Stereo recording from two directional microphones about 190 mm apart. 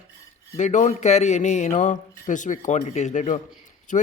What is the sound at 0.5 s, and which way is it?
Speech, 40° left (ahead or behind).